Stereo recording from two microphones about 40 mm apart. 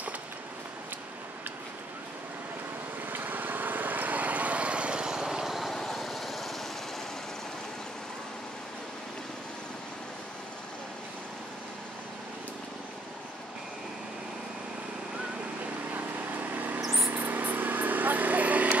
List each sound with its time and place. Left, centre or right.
3.1 s vehicle: right
5.1 s vehicle: centre
5.8 s vehicle: centre
15.9 s vehicle: right
16.8 s mouse: centre
17.1 s vehicle: right